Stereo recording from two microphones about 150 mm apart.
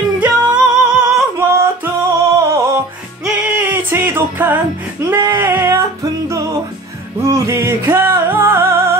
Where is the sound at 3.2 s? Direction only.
15° right (ahead or behind).